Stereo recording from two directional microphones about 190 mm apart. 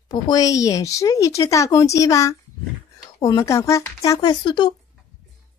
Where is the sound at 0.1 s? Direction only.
20° left (ahead or behind).